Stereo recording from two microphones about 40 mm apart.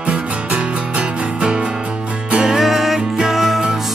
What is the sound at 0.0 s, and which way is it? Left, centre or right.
Music, right.